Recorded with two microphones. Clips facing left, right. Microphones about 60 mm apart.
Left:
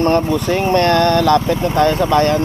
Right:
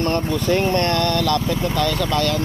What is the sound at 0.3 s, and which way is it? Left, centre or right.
Speech, centre.